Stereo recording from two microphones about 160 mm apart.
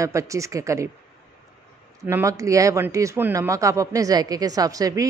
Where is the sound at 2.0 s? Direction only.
20° right (ahead or behind).